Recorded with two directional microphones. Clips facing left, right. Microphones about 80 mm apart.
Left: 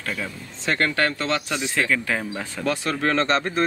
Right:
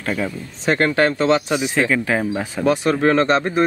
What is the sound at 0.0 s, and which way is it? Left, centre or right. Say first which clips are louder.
Speech: right 7 dB; centre.